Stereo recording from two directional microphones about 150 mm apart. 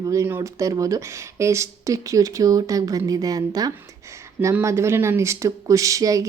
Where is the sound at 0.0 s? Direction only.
20° right (ahead or behind).